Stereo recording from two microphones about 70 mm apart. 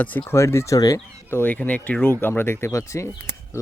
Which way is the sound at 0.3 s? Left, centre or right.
Left.